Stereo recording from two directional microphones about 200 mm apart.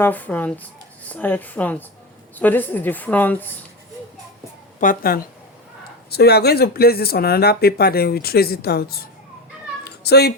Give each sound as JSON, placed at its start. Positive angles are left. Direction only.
{"t": 0.0, "sound": "speech", "side_deg": 10}
{"t": 4.8, "sound": "speech", "side_deg": 45}
{"t": 9.8, "sound": "cat", "side_deg": 55}